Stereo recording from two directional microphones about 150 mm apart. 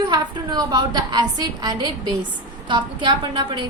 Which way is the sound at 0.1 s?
30° right (ahead or behind).